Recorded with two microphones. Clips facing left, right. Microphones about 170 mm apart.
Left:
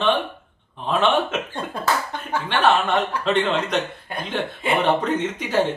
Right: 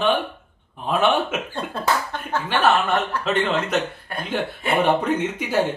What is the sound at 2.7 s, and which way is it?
Speech, 10° left (ahead or behind).